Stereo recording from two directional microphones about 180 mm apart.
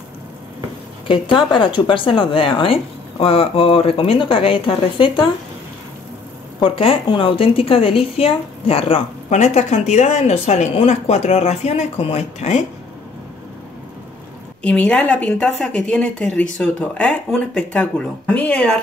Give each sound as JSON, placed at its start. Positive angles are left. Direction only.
{"t": 1.0, "sound": "speech", "side_deg": 25}
{"t": 6.6, "sound": "a woman's voice", "side_deg": 30}
{"t": 14.6, "sound": "speech", "side_deg": 5}